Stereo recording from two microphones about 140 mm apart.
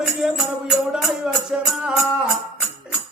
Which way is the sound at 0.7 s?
Centre (ahead or behind).